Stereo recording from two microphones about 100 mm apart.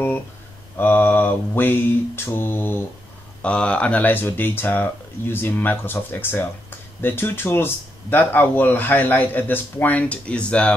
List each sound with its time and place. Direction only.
0.7 s mantra: 20° left (ahead or behind)
3.4 s speech: 10° left (ahead or behind)